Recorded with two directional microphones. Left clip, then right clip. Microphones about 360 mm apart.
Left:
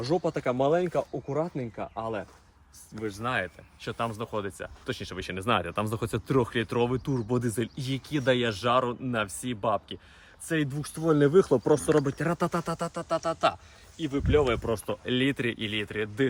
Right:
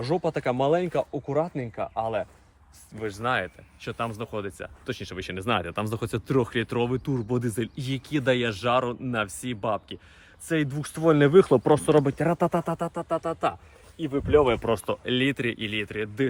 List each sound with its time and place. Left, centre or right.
0.0 s speech: right
3.0 s speech: centre
11.3 s speech: right
12.0 s speech: centre
14.8 s speech: centre